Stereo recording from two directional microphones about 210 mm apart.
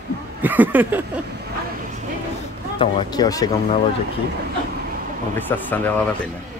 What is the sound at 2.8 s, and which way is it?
Speech, 20° left (ahead or behind).